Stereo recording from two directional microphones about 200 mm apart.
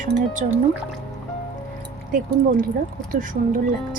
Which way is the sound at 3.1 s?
45° right (ahead or behind).